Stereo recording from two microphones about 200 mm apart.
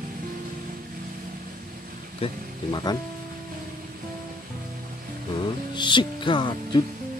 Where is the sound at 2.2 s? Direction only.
30° left (ahead or behind).